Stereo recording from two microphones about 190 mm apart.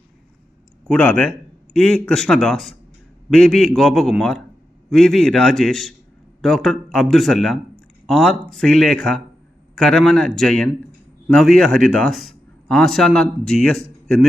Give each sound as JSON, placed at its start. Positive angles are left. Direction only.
{"t": 0.9, "sound": "a man's voice", "side_deg": 5}